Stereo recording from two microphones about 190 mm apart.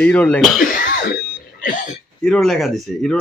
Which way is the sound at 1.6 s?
45° left (ahead or behind).